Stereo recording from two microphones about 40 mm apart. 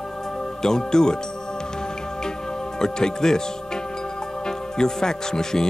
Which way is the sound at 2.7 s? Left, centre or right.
Centre.